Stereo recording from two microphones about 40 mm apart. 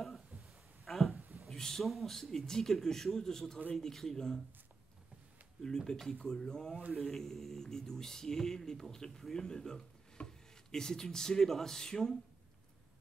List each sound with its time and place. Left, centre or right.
0.8 s a sound: centre
1.8 s speech: centre
5.6 s speech: centre